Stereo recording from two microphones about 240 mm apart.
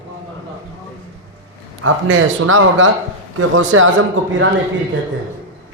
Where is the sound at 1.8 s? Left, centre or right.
Right.